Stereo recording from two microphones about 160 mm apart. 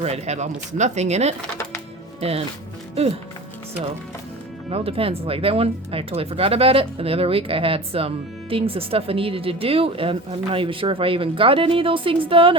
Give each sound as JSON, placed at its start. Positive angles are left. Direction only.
{"t": 0.0, "sound": "speech", "side_deg": -45}
{"t": 4.7, "sound": "speech", "side_deg": -35}